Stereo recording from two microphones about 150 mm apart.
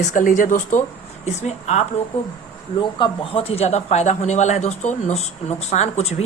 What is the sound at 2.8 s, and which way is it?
Speech, 30° left (ahead or behind).